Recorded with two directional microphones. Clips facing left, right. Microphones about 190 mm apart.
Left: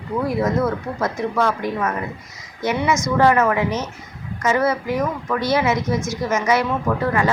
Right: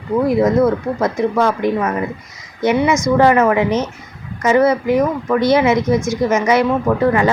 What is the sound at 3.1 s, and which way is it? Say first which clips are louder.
Speech: right 3 dB; 15° right (ahead or behind).